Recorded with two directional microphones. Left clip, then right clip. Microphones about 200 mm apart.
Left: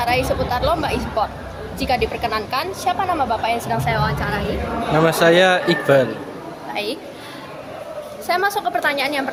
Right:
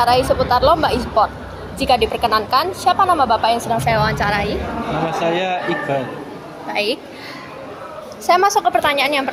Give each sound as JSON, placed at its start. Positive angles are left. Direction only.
{"t": 0.0, "sound": "a woman's voice", "side_deg": -15}
{"t": 3.8, "sound": "a woman's voice", "side_deg": -30}
{"t": 5.0, "sound": "speech", "side_deg": 45}
{"t": 6.7, "sound": "a woman's voice", "side_deg": -25}
{"t": 8.3, "sound": "a woman's voice", "side_deg": -20}